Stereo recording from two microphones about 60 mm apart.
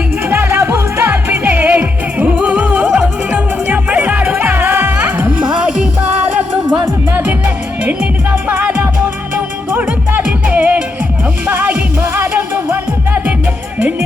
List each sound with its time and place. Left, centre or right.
0.3 s music: right; by 4.4 s centre
4.4 s music: right
5.4 s music: centre
7.3 s music: right
8.4 s music: right